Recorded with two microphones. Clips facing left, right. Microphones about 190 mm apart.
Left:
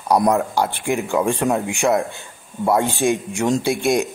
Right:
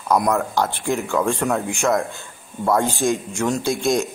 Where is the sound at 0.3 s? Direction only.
15° left (ahead or behind).